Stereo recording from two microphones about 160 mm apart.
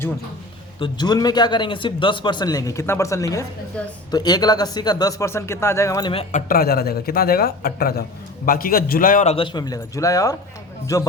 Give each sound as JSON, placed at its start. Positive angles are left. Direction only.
{"t": 0.8, "sound": "a man's voice", "side_deg": 25}
{"t": 3.8, "sound": "speech", "side_deg": 5}
{"t": 4.1, "sound": "a man's voice", "side_deg": 25}
{"t": 6.3, "sound": "a man's voice", "side_deg": 65}
{"t": 9.2, "sound": "a man's voice", "side_deg": 35}